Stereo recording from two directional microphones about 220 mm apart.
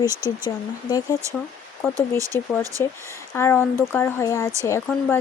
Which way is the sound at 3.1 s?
10° left (ahead or behind).